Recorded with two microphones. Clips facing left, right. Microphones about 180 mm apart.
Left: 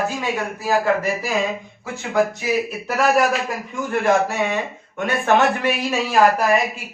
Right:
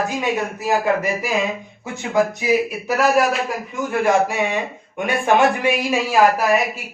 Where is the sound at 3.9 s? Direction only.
10° right (ahead or behind).